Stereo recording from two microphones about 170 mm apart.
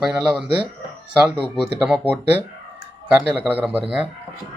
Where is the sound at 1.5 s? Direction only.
5° right (ahead or behind).